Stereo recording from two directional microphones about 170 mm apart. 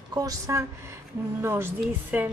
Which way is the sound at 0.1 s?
20° right (ahead or behind).